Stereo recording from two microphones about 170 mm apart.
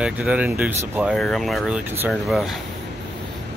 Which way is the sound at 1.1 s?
Centre (ahead or behind).